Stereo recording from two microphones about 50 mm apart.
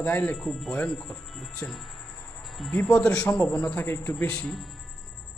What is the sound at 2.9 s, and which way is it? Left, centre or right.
Speech, left.